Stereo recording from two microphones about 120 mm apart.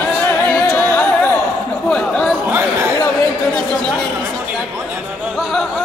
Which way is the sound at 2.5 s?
20° right (ahead or behind).